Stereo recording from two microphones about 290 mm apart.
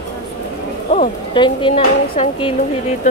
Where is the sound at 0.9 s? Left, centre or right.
Left.